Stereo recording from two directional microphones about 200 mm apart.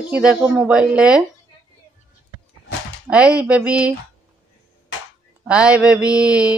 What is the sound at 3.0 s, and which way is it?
Speech, 5° right (ahead or behind).